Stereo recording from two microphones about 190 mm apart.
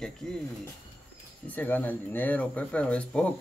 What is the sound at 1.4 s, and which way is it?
Speech, 10° left (ahead or behind).